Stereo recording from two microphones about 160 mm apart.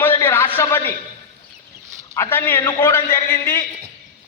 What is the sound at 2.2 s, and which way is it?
A man's voice, 15° left (ahead or behind).